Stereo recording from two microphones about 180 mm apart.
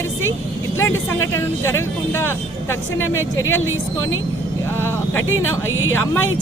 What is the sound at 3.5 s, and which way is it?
Speech, 90° left.